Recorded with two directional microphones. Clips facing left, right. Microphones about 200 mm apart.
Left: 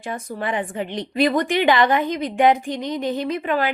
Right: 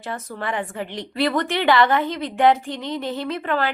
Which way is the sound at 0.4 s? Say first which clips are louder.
Left 2 dB; 20° left (ahead or behind).